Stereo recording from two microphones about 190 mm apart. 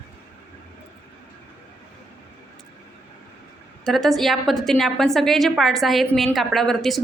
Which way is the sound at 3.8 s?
Centre (ahead or behind).